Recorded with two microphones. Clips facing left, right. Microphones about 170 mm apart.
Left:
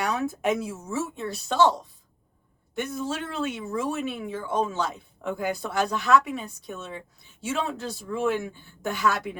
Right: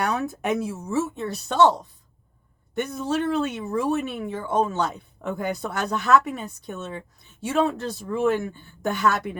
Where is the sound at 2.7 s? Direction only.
50° right (ahead or behind).